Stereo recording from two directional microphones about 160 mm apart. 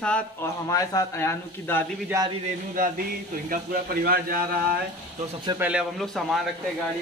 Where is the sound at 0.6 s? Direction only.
20° left (ahead or behind).